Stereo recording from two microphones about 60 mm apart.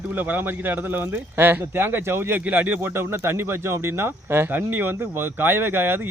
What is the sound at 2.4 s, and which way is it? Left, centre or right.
Speech, right.